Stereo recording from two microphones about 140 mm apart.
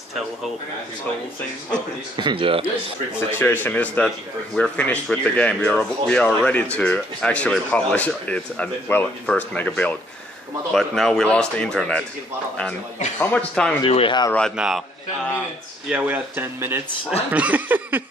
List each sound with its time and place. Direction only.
2.1 s speech: 35° right (ahead or behind)
3.3 s speech: 15° left (ahead or behind)
13.2 s speech: 10° left (ahead or behind)
13.8 s speech: 40° left (ahead or behind)
14.6 s speech: 5° right (ahead or behind)
15.9 s speech: 10° right (ahead or behind)